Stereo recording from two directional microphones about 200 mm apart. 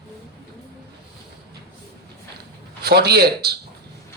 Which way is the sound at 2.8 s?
55° right (ahead or behind).